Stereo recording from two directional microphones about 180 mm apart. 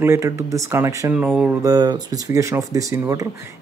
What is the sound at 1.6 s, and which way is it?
Speech, 20° right (ahead or behind).